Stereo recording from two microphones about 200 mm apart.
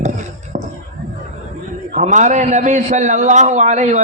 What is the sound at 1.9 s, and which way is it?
A man's voice, 40° right (ahead or behind).